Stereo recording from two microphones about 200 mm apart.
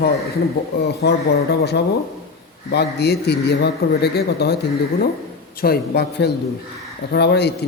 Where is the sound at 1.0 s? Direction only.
55° left (ahead or behind).